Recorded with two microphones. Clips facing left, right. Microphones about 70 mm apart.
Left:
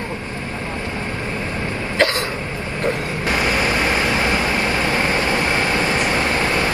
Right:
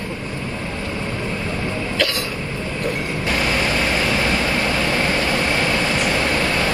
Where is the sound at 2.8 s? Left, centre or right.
Left.